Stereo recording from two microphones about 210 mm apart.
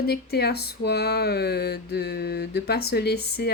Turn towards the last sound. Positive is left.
turn(degrees=50)  # may be behind; listen again after turning